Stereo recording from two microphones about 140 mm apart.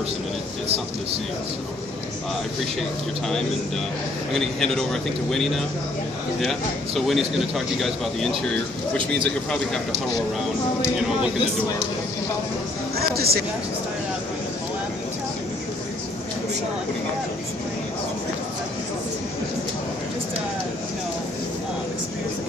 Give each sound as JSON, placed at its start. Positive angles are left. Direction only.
{"t": 4.3, "sound": "speech", "side_deg": 0}
{"t": 7.1, "sound": "speech", "side_deg": 0}
{"t": 12.9, "sound": "speech", "side_deg": -90}